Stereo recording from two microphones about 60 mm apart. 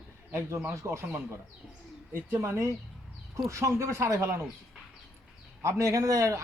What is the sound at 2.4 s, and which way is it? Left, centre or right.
Speech, right.